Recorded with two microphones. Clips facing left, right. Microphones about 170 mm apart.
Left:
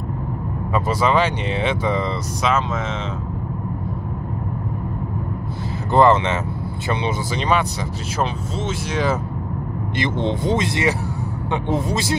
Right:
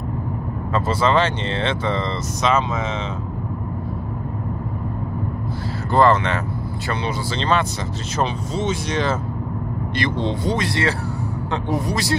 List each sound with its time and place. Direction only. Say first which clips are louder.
0.7 s speech: even; 10° left (ahead or behind)
5.9 s speech: left 1 dB; 20° left (ahead or behind)
9.9 s speech: left 1 dB; 20° left (ahead or behind)